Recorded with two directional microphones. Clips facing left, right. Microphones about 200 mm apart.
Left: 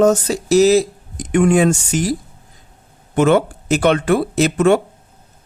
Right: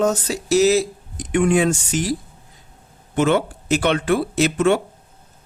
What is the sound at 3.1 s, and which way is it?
Speech, 45° left (ahead or behind).